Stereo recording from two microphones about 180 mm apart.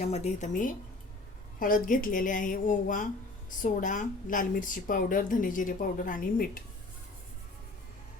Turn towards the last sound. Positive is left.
turn(degrees=50)  # may be behind; listen again after turning